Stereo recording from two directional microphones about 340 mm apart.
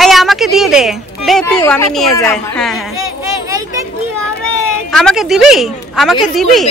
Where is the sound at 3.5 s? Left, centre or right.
Centre.